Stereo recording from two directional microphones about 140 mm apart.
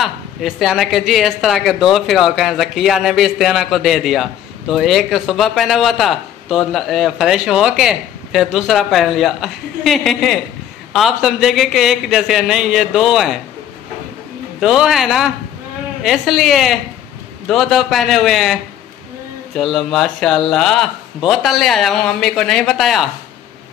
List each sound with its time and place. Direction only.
0.0 s speech: centre (ahead or behind)
14.6 s speech: 5° right (ahead or behind)